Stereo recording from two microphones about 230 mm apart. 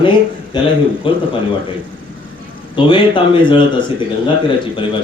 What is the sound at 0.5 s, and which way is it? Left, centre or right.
Speech, centre.